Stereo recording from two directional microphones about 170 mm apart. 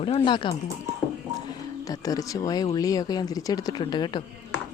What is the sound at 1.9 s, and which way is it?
Speech, 20° left (ahead or behind).